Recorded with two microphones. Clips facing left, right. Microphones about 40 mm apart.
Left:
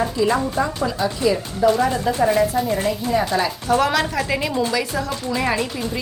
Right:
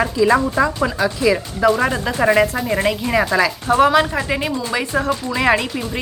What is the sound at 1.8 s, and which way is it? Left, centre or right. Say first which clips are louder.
Speech: right 1 dB; right.